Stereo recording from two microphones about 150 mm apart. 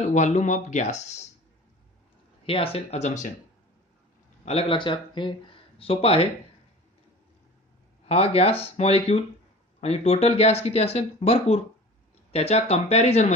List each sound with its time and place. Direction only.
0.0 s speech: 50° left (ahead or behind)
2.4 s speech: 40° left (ahead or behind)
4.5 s speech: 40° left (ahead or behind)
8.1 s speech: 40° left (ahead or behind)